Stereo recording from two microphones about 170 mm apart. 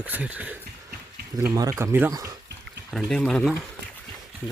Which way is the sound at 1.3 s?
25° right (ahead or behind).